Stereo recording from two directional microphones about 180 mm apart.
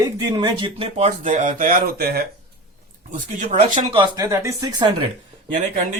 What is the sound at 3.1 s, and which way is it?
Speech, 45° right (ahead or behind).